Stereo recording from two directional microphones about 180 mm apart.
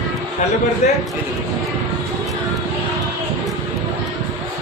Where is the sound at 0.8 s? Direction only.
40° left (ahead or behind).